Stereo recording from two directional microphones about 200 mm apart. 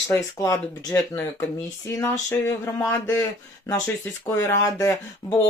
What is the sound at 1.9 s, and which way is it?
Speech, 15° left (ahead or behind).